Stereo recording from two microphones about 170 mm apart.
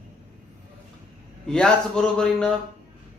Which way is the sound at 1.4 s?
5° left (ahead or behind).